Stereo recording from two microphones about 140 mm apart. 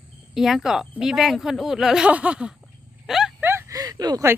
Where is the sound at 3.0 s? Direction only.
5° right (ahead or behind).